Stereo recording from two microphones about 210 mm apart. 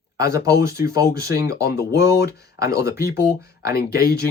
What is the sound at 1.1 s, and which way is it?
Speech, 50° left (ahead or behind).